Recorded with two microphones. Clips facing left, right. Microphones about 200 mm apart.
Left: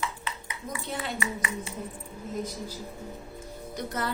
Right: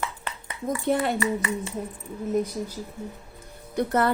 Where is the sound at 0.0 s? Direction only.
55° right (ahead or behind).